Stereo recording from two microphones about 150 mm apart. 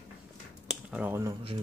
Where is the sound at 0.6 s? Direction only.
10° right (ahead or behind).